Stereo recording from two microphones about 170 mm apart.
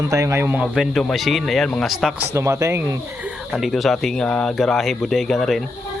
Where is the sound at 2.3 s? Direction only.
15° right (ahead or behind).